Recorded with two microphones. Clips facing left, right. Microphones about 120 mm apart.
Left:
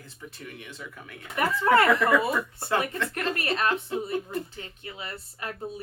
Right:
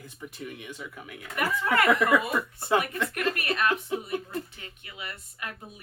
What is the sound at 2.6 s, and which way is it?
Speech, 15° right (ahead or behind).